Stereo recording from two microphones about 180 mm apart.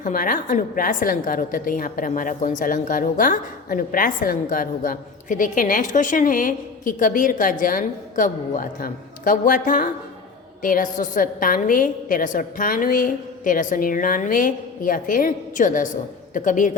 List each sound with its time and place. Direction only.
0.0 s a woman's voice: 50° left (ahead or behind)